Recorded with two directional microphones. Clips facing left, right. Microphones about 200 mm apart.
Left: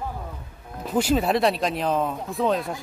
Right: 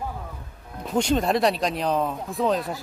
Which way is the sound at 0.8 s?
5° left (ahead or behind).